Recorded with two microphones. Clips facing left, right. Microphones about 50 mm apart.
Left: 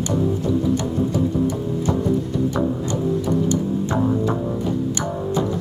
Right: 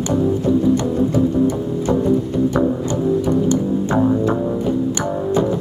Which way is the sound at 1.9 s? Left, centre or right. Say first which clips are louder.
Right 5 dB; right.